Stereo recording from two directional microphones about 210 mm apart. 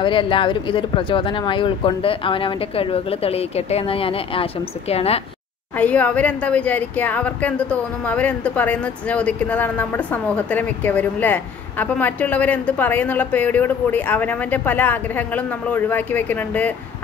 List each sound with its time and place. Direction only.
0.0 s speech: 25° left (ahead or behind)
5.8 s speech: 5° left (ahead or behind)